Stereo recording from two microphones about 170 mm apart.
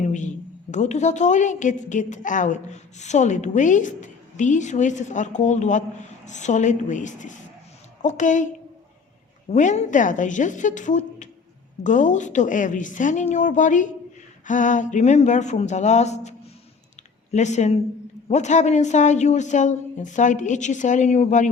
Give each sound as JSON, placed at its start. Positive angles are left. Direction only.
{"t": 0.0, "sound": "a sound", "side_deg": 45}
{"t": 0.7, "sound": "a woman's voice", "side_deg": 45}
{"t": 9.5, "sound": "a woman's voice", "side_deg": 45}
{"t": 17.3, "sound": "a woman's voice", "side_deg": 45}